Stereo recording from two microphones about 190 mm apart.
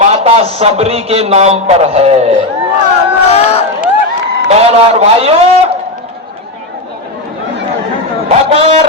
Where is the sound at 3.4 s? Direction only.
30° left (ahead or behind).